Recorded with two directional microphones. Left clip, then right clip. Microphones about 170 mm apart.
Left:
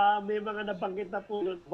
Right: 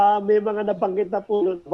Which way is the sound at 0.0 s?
30° right (ahead or behind).